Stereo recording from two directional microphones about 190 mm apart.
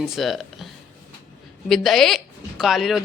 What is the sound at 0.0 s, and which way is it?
Speech, centre (ahead or behind).